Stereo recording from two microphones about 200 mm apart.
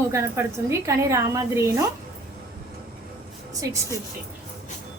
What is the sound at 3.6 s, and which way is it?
Speech, 15° right (ahead or behind).